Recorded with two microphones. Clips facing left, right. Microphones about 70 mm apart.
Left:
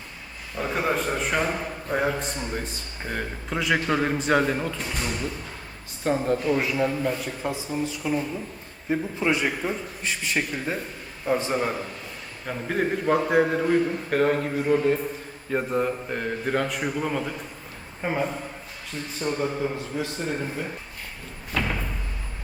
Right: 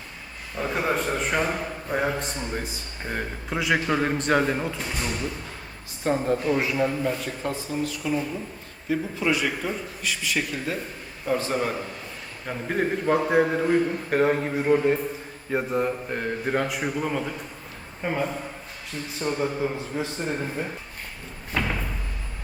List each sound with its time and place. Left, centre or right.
0.5 s a man's voice: centre
11.5 s a man's voice: centre
15.5 s a man's voice: centre
19.2 s a man's voice: centre
21.5 s slam: centre